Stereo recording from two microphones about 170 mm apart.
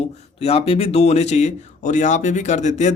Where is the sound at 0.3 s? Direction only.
35° left (ahead or behind).